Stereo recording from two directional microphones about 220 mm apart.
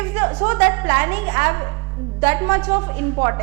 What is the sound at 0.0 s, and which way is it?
A woman's voice, 10° right (ahead or behind).